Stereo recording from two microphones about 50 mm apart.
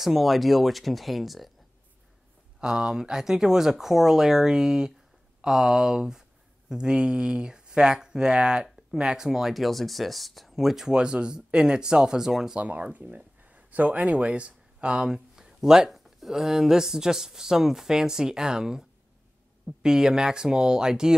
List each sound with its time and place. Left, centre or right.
0.0 s speech: centre
2.6 s speech: centre
10.9 s speech: centre
12.5 s speech: right